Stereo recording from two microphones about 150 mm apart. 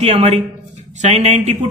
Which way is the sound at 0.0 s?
45° right (ahead or behind).